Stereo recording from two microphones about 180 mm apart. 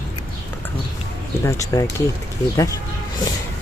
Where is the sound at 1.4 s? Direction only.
15° left (ahead or behind).